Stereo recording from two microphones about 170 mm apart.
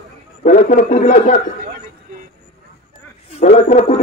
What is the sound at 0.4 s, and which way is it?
Speech, 50° left (ahead or behind).